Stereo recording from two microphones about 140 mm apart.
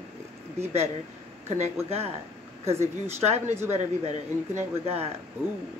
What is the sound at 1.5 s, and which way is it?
Speech, 50° right (ahead or behind).